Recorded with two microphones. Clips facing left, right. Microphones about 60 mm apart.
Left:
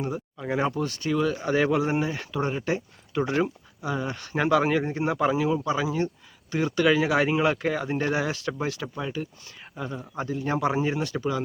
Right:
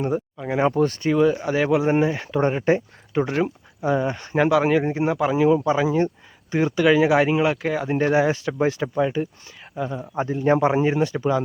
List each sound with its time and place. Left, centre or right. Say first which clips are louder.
0.3 s speech: right 4 dB; centre
0.7 s a man's voice: right 8 dB; right
1.1 s speech: right 3 dB; centre
1.8 s speech: right 6 dB; right
2.5 s speech: right 7 dB; right
3.8 s speech: right 8 dB; right
4.4 s speech: right 4 dB; centre
4.8 s speech: right 5 dB; right
5.0 s speech: right 3 dB; centre
5.6 s speech: right 6 dB; right
7.9 s speech: right 7 dB; right
9.7 s speech: right 6 dB; centre
10.2 s a man's voice: right 8 dB; right
10.8 s speech: right 6 dB; right